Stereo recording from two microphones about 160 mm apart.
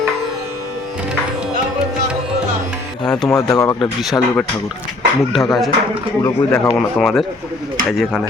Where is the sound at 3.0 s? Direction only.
5° left (ahead or behind).